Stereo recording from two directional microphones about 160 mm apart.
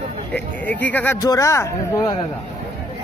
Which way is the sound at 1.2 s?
20° left (ahead or behind).